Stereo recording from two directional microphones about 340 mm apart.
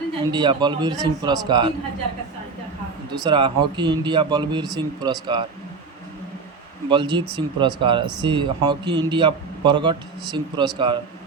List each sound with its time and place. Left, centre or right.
0.2 s speech: centre
3.1 s speech: centre
6.8 s speech: centre